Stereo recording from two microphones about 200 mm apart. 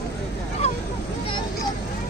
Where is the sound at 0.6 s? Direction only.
30° left (ahead or behind).